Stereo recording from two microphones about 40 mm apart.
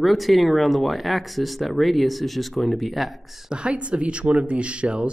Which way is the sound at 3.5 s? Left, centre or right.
Right.